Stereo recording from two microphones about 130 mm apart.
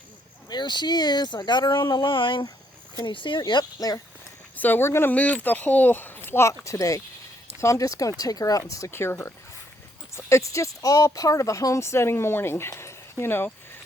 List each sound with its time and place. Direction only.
0.5 s speech: 35° left (ahead or behind)
4.5 s speech: 15° left (ahead or behind)